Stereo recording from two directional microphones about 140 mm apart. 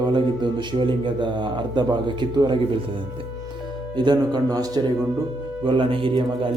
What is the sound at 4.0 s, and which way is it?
A man's voice, 30° right (ahead or behind).